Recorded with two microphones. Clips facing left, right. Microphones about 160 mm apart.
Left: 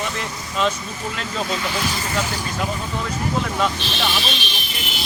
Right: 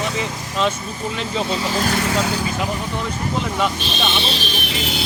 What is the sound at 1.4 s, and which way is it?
Speech, 30° right (ahead or behind).